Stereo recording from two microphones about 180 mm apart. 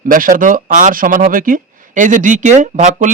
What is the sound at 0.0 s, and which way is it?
Speech, 50° right (ahead or behind).